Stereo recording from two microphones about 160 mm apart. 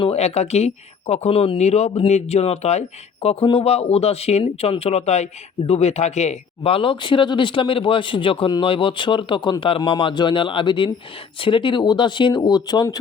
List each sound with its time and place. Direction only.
0.0 s speech: 40° left (ahead or behind); by 13.0 s 25° left (ahead or behind)